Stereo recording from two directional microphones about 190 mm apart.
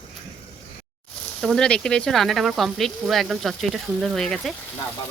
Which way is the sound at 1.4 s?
Centre (ahead or behind).